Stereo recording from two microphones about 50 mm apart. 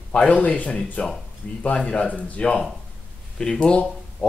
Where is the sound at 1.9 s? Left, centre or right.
Left.